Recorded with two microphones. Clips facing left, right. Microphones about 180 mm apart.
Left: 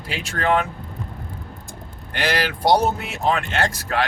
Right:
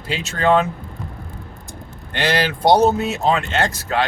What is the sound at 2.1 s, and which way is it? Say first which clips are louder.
Speech: right 3 dB; 25° right (ahead or behind).